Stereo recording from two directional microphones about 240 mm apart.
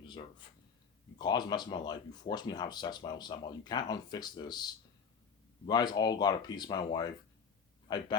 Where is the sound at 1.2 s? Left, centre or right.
Centre.